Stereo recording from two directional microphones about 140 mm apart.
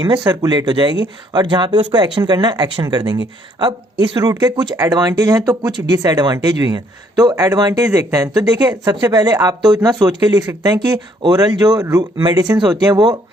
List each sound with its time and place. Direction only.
0.0 s speech: 30° right (ahead or behind)